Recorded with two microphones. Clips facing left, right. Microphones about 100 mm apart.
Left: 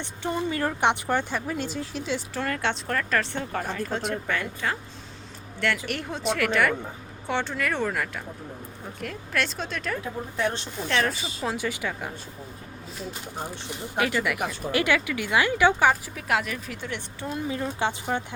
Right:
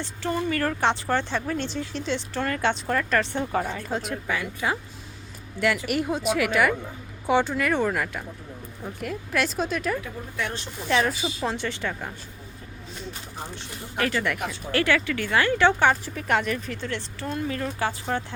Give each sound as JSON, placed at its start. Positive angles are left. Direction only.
{"t": 0.0, "sound": "speech", "side_deg": 20}
{"t": 10.0, "sound": "speech", "side_deg": 30}
{"t": 10.8, "sound": "speech", "side_deg": -5}
{"t": 13.7, "sound": "speech", "side_deg": 15}